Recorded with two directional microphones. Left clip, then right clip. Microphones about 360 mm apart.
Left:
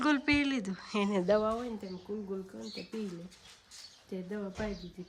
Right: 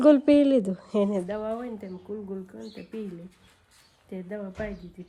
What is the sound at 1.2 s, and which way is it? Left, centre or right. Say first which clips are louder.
Speech: left 4 dB; centre.